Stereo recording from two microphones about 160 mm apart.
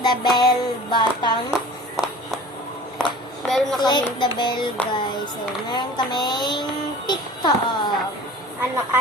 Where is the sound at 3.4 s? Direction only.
Centre (ahead or behind).